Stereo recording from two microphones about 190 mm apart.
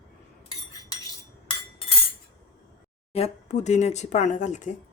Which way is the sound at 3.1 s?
35° left (ahead or behind).